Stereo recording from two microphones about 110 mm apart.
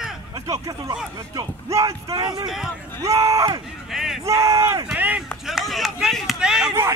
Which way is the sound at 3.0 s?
30° right (ahead or behind).